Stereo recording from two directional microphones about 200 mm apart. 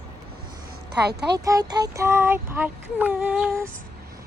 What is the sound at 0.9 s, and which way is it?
Speech, 55° right (ahead or behind).